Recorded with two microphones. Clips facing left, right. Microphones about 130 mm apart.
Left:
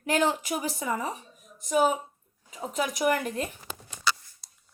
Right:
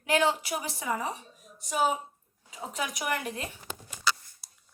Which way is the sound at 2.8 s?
45° left (ahead or behind).